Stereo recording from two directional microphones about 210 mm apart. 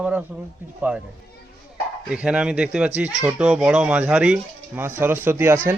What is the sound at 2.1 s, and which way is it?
Speech, 5° right (ahead or behind).